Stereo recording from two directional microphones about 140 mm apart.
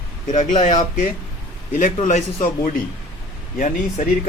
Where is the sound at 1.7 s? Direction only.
70° left (ahead or behind).